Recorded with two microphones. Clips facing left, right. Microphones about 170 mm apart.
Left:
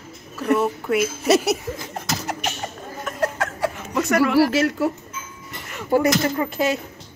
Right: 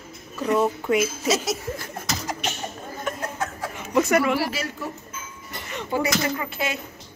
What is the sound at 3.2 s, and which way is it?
Chuckle, 75° left (ahead or behind).